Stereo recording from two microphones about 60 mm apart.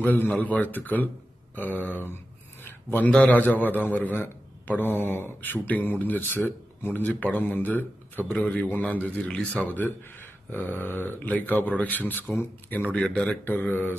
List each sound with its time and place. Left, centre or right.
0.0 s a man's voice: left
2.6 s a sound: left
3.1 s a man's voice: left
7.1 s a man's voice: left